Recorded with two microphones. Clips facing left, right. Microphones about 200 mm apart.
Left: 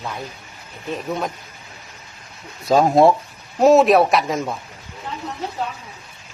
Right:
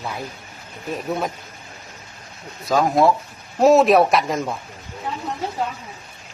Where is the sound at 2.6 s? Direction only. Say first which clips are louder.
Left 3 dB; 25° left (ahead or behind).